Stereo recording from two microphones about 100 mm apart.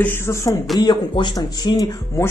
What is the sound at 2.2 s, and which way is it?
Speech, 30° left (ahead or behind).